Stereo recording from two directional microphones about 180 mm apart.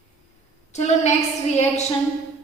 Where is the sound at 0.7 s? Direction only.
40° left (ahead or behind).